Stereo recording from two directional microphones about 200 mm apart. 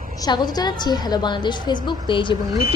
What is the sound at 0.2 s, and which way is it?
A woman's voice, 20° left (ahead or behind).